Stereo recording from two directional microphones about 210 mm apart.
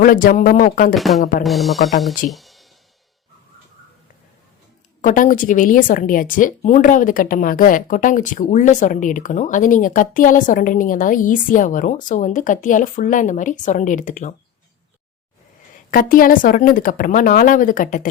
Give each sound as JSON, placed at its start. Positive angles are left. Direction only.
{"t": 0.0, "sound": "a woman's voice", "side_deg": 40}
{"t": 0.9, "sound": "speech", "side_deg": 0}
{"t": 1.2, "sound": "a woman's voice", "side_deg": 35}
{"t": 1.5, "sound": "speech", "side_deg": 0}
{"t": 2.3, "sound": "music", "side_deg": 0}
{"t": 5.0, "sound": "a woman's voice", "side_deg": 40}
{"t": 15.9, "sound": "a woman's voice", "side_deg": 40}